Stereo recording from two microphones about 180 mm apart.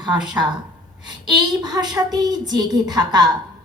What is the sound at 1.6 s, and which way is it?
A woman's voice, 20° right (ahead or behind).